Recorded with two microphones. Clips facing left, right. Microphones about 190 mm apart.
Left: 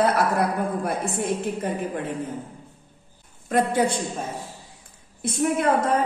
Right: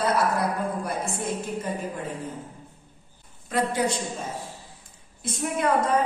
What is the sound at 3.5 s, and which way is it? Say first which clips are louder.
Speech: left 4 dB; 50° left (ahead or behind).